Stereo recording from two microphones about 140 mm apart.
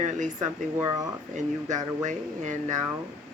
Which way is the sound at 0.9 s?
25° right (ahead or behind).